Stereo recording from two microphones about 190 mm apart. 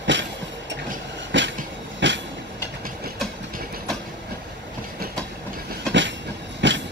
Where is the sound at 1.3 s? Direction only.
75° right (ahead or behind).